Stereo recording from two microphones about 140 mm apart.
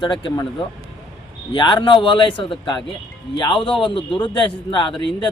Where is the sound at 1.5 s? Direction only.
35° left (ahead or behind).